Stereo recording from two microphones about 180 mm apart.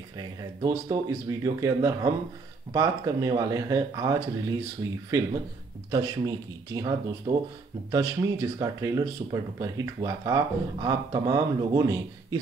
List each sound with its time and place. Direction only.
0.6 s speech: 25° right (ahead or behind)